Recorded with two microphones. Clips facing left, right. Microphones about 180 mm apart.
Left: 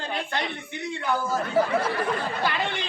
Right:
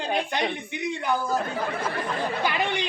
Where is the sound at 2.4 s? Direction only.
15° right (ahead or behind).